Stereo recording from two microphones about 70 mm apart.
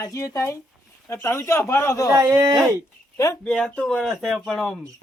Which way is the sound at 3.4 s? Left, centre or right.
Centre.